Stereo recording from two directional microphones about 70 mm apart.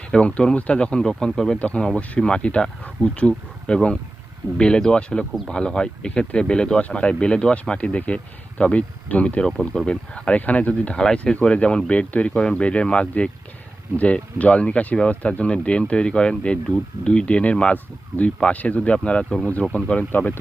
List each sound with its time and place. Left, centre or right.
0.1 s speech: centre
9.5 s speech: centre; by 20.4 s left